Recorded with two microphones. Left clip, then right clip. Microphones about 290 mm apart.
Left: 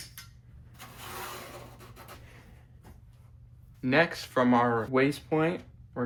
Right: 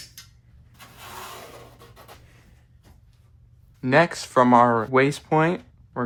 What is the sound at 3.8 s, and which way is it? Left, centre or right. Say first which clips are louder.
Speech: right 6 dB; centre.